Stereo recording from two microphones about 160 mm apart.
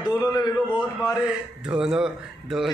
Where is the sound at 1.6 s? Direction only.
5° right (ahead or behind).